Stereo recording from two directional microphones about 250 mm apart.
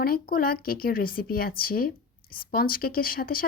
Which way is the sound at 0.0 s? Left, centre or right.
Left.